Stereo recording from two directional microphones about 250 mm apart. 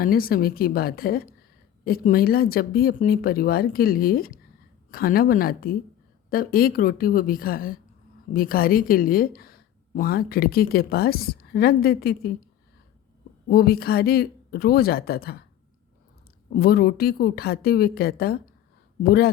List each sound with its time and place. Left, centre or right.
0.0 s speech: left
13.5 s speech: left
16.6 s speech: left